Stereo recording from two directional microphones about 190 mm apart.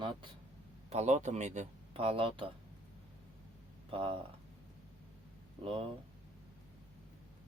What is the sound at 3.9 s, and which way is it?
Speech, 30° right (ahead or behind).